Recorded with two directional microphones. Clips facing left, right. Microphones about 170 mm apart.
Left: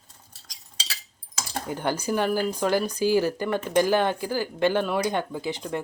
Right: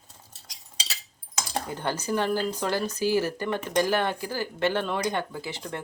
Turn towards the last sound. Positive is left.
turn(degrees=15)  # may be behind; listen again after turning